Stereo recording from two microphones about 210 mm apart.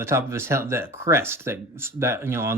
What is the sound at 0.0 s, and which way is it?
Speech, 10° right (ahead or behind).